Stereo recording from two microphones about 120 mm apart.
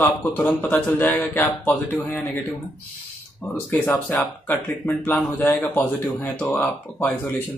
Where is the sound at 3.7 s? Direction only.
15° left (ahead or behind).